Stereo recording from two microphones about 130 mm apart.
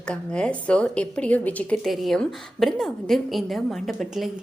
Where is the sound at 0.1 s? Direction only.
5° left (ahead or behind).